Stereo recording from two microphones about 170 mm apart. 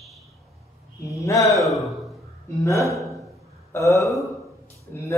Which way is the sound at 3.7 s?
20° left (ahead or behind).